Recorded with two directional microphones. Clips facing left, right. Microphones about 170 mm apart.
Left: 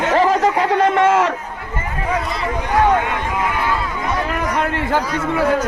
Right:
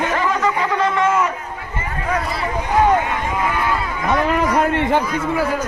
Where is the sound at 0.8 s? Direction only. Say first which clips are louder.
Left 4 dB; 60° left (ahead or behind); by 1.3 s 80° left.